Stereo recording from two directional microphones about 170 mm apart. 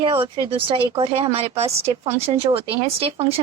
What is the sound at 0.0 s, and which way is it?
Speech, 30° right (ahead or behind).